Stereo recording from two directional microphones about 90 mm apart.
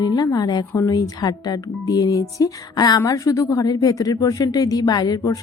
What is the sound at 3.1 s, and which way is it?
A woman's voice, 40° left (ahead or behind).